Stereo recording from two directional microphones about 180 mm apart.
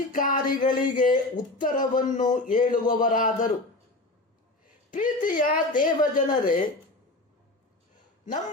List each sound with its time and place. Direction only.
0.1 s speech: 50° left (ahead or behind)
4.9 s speech: 45° left (ahead or behind)